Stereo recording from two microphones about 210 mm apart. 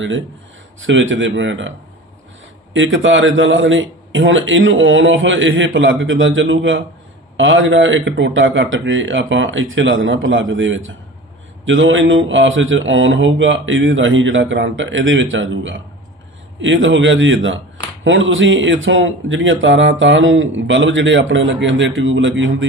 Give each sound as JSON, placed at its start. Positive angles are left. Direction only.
{"t": 0.8, "sound": "speech", "side_deg": -65}
{"t": 2.7, "sound": "speech", "side_deg": -65}